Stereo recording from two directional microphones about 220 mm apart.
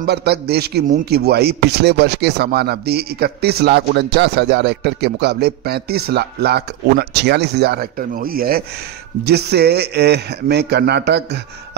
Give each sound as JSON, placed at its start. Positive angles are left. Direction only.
{"t": 0.0, "sound": "a man's voice", "side_deg": -45}